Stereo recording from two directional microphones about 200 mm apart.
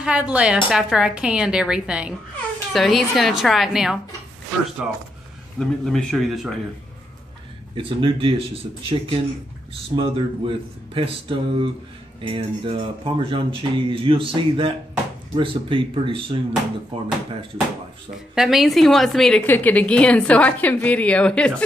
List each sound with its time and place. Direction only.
0.0 s a woman's voice: 5° right (ahead or behind)
7.7 s speech: 25° right (ahead or behind)
18.3 s a woman's voice: centre (ahead or behind)